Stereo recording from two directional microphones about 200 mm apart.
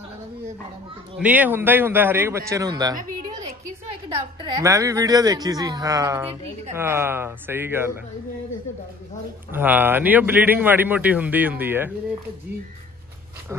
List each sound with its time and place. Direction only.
1.1 s a man's voice: 5° right (ahead or behind)
4.4 s a man's voice: 20° right (ahead or behind)
9.5 s a man's voice: 10° right (ahead or behind)